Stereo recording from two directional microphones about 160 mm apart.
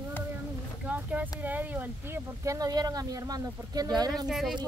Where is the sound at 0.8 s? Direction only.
10° right (ahead or behind).